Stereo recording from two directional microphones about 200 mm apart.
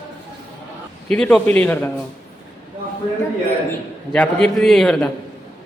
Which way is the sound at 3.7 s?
5° left (ahead or behind).